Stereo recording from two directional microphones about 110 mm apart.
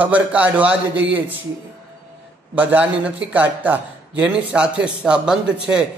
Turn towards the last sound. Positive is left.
turn(degrees=-5)  # may be behind; listen again after turning